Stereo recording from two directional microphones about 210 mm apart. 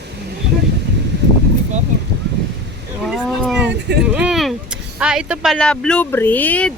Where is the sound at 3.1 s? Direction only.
Centre (ahead or behind).